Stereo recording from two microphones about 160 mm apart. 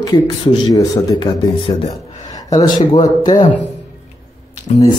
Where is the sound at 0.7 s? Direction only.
25° left (ahead or behind).